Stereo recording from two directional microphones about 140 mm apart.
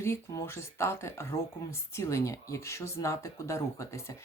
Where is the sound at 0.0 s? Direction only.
20° left (ahead or behind).